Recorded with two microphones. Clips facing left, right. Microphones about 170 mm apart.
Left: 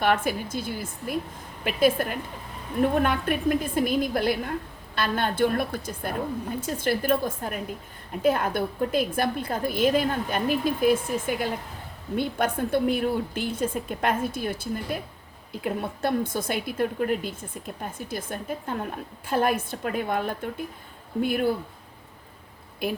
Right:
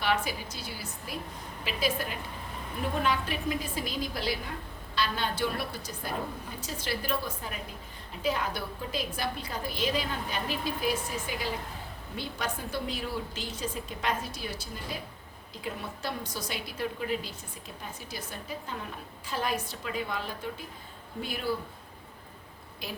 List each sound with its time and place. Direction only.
0.0 s a woman's voice: 50° left (ahead or behind)
22.8 s a woman's voice: 55° left (ahead or behind)